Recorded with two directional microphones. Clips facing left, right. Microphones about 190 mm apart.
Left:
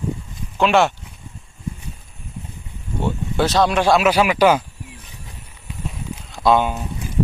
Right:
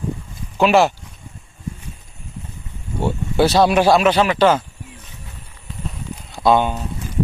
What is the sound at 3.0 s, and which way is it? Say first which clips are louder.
Speech: right 3 dB; 10° right (ahead or behind).